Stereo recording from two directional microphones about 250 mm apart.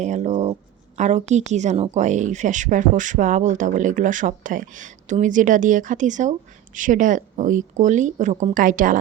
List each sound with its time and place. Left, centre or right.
0.0 s speech: right